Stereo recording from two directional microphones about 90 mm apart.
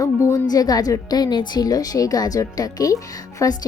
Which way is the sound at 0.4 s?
45° left (ahead or behind).